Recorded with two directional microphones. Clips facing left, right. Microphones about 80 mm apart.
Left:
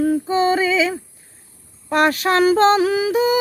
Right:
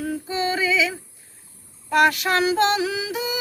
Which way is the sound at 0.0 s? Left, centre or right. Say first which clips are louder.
Left 8 dB; left.